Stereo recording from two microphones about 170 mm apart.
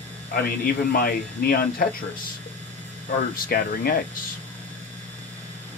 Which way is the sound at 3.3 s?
60° left (ahead or behind).